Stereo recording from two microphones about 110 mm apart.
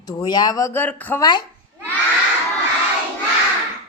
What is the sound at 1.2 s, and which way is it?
Speech, 40° left (ahead or behind).